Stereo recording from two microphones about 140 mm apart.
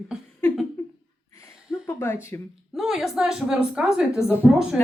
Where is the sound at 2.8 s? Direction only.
Centre (ahead or behind).